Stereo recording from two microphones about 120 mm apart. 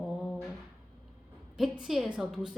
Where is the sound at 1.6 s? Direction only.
Centre (ahead or behind).